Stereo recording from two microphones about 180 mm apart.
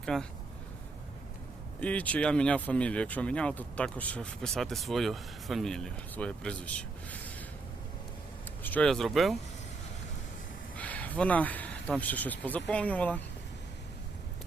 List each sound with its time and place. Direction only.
0.0 s speech: 5° left (ahead or behind)
1.8 s speech: 5° left (ahead or behind)
8.6 s speech: 5° left (ahead or behind)
10.8 s speech: 10° left (ahead or behind)